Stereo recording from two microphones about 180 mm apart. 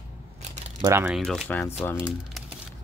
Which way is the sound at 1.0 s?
Centre (ahead or behind).